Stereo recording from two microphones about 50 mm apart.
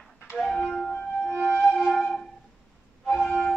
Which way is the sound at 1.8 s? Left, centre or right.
Centre.